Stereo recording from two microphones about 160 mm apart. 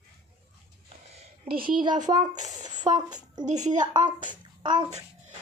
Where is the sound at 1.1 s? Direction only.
40° right (ahead or behind).